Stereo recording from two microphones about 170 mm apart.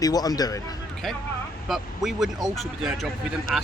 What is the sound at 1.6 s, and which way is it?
Speech, centre (ahead or behind).